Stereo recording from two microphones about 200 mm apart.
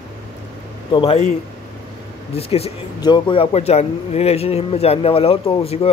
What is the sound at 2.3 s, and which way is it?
Speech, 30° left (ahead or behind).